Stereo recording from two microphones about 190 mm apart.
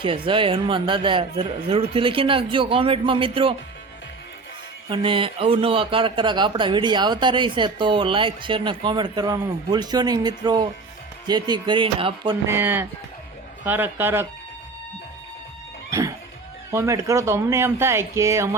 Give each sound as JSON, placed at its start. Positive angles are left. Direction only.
{"t": 0.0, "sound": "speech", "side_deg": -25}
{"t": 4.9, "sound": "speech", "side_deg": -25}
{"t": 12.5, "sound": "speech", "side_deg": -10}
{"t": 15.9, "sound": "music", "side_deg": -15}
{"t": 16.7, "sound": "speech", "side_deg": -15}